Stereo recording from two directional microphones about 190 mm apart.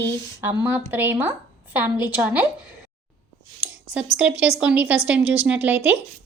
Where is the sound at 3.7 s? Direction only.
5° right (ahead or behind).